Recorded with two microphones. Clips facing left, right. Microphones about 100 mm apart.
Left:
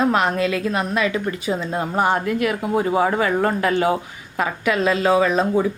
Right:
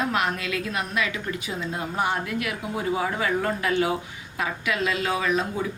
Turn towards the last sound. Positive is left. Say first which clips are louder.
# left 8 dB
turn(degrees=35)  # may be behind; listen again after turning